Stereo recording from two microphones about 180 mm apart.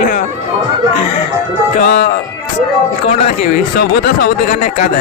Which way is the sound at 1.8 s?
65° left (ahead or behind).